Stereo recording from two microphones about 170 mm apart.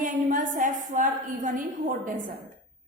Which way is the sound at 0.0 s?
50° right (ahead or behind).